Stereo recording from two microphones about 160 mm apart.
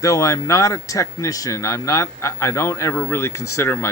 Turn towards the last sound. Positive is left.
turn(degrees=15)  # may be behind; listen again after turning